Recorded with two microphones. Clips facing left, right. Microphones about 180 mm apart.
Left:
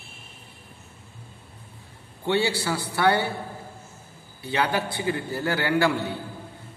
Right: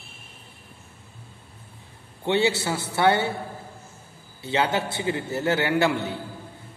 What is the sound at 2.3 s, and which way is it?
A man's voice, 20° right (ahead or behind).